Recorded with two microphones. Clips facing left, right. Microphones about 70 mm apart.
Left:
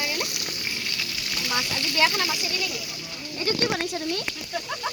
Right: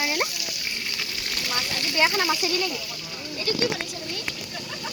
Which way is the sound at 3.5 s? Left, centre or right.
Left.